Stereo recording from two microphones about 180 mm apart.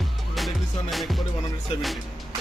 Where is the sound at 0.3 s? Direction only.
Centre (ahead or behind).